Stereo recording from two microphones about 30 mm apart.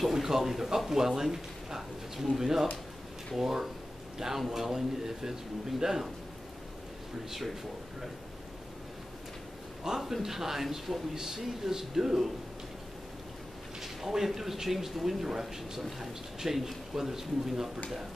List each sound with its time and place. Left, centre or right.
0.1 s speech: centre
9.8 s speech: centre
13.7 s speech: centre